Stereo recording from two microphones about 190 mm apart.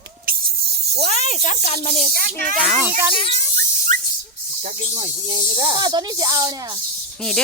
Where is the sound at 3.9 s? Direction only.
40° right (ahead or behind).